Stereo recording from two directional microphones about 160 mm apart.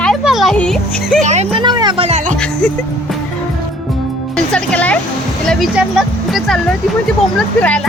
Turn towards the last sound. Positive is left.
turn(degrees=5)  # may be behind; listen again after turning